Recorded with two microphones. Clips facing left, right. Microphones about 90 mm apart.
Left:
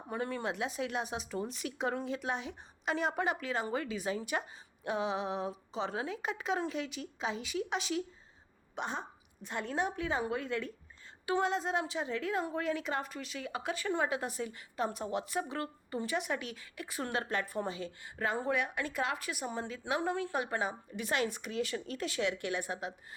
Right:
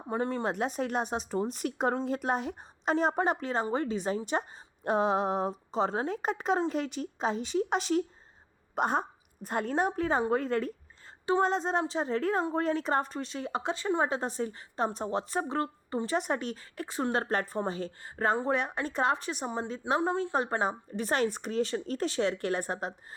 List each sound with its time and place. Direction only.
0.1 s speech: 30° right (ahead or behind)
8.7 s a woman's voice: 50° right (ahead or behind)